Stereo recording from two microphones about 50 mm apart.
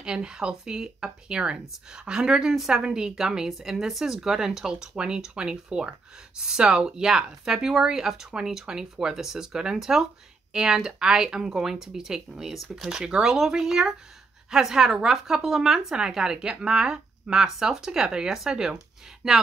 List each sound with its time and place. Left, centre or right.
0.0 s speech: centre